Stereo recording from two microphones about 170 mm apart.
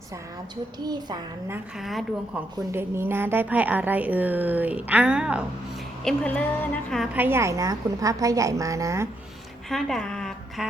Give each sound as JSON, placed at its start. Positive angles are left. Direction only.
{"t": 0.9, "sound": "a woman's voice", "side_deg": -25}
{"t": 1.8, "sound": "a woman's voice", "side_deg": 0}
{"t": 2.7, "sound": "a woman's voice", "side_deg": -15}
{"t": 6.1, "sound": "a woman's voice", "side_deg": 10}
{"t": 7.1, "sound": "a woman's voice", "side_deg": -10}
{"t": 9.6, "sound": "a sound", "side_deg": 0}